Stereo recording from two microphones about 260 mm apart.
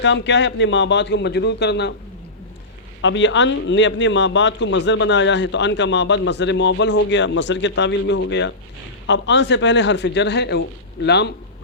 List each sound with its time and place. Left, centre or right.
0.0 s a man's voice: left
3.0 s a man's voice: left